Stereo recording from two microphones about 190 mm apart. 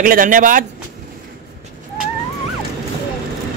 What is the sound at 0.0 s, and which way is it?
Speech, 45° right (ahead or behind).